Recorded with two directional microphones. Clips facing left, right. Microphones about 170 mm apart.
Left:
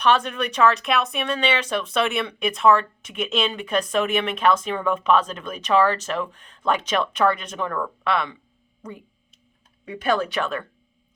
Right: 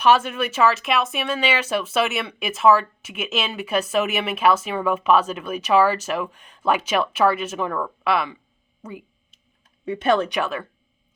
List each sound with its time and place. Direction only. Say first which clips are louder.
0.0 s speech: right 2 dB; 5° right (ahead or behind)
9.8 s speech: right 3 dB; 25° right (ahead or behind)
10.4 s speech: right 1 dB; 5° right (ahead or behind)